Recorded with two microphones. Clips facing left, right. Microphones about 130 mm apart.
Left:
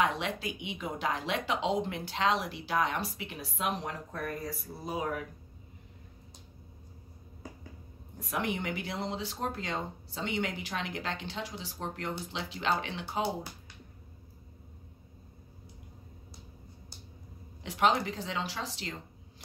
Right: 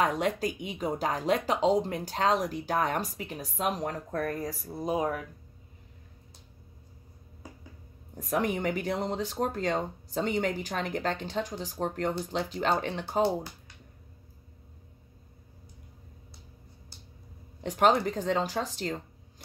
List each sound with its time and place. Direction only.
0.0 s speech: 40° right (ahead or behind)
8.2 s speech: 40° right (ahead or behind)
17.6 s speech: 45° right (ahead or behind)